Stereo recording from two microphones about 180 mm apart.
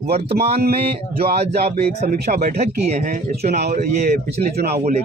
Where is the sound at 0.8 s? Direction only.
35° right (ahead or behind).